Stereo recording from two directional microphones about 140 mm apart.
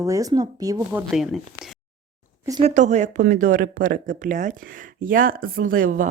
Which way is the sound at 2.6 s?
55° right (ahead or behind).